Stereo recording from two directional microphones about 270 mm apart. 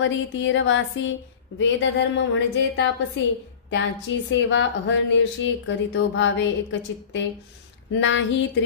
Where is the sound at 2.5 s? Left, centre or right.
Left.